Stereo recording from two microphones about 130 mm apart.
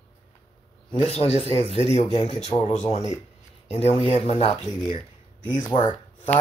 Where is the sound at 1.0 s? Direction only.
50° left (ahead or behind).